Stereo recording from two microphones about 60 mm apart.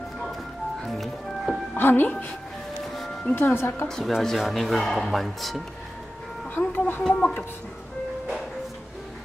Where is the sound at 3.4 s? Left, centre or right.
Left.